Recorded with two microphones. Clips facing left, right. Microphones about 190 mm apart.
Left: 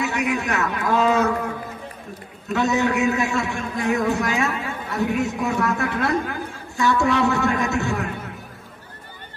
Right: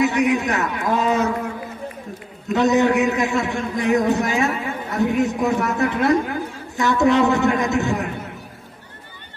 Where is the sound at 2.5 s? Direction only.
20° right (ahead or behind).